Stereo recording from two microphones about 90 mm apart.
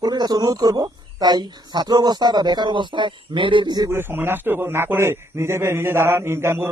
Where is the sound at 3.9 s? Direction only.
25° right (ahead or behind).